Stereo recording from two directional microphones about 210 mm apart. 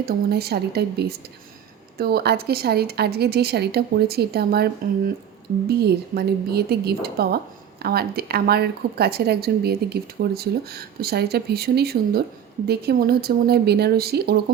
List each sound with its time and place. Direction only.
0.0 s speech: 50° right (ahead or behind)